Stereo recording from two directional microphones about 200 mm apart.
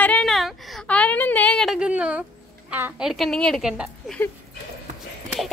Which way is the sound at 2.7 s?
10° right (ahead or behind).